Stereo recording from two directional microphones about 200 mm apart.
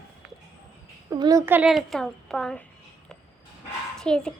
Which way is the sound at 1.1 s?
20° right (ahead or behind).